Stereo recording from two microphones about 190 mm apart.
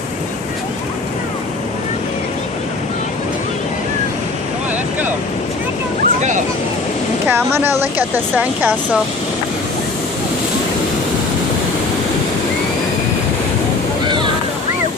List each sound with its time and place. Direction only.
6.0 s vehicle: 40° right (ahead or behind)
7.3 s speech: 10° right (ahead or behind)